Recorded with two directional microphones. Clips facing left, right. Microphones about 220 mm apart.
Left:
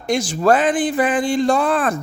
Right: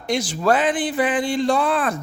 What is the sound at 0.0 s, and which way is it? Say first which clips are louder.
A woman's voice: left 3 dB; 45° left (ahead or behind).